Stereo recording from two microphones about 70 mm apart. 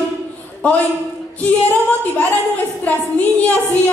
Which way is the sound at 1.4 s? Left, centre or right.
Left.